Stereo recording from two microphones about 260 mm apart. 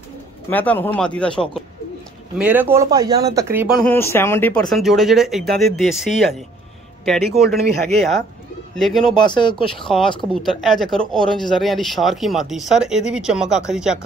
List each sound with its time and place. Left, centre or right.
0.5 s speech: centre
3.8 s speech: centre
8.7 s speech: centre
9.2 s speech: centre
9.8 s speech: centre